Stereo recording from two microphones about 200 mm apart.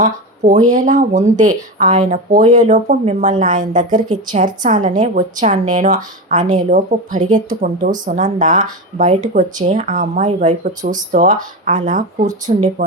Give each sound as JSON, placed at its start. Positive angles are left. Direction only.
{"t": 0.0, "sound": "a woman's voice", "side_deg": -40}